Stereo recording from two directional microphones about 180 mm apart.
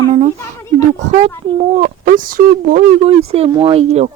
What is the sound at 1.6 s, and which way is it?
Speech, 45° right (ahead or behind).